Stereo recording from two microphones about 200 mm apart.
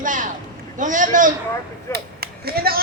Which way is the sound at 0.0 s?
40° right (ahead or behind).